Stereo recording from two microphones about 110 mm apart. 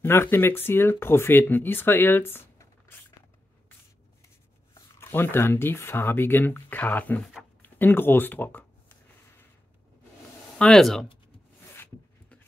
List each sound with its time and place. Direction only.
0.0 s speech: 20° left (ahead or behind)
4.7 s speech: 20° left (ahead or behind)
10.6 s speech: 5° left (ahead or behind)
11.7 s a sound: 20° left (ahead or behind)